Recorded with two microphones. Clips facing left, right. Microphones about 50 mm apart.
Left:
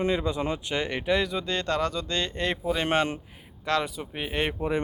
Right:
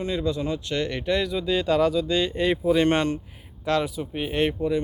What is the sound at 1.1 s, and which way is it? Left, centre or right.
Speech, centre.